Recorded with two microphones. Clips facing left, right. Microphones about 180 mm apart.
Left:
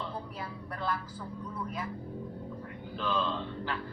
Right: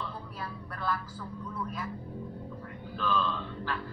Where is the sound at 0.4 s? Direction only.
20° left (ahead or behind).